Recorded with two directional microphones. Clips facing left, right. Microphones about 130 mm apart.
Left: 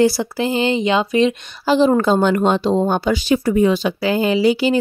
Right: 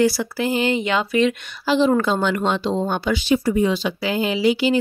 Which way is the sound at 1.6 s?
40° left (ahead or behind).